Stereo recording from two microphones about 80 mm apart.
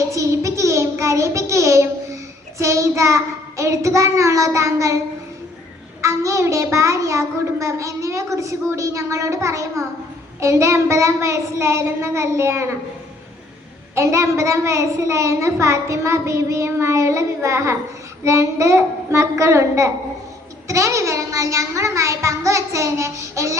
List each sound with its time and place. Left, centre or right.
0.1 s child singing: right
2.6 s a child's voice: right
6.0 s a child's voice: right
13.9 s a child's voice: right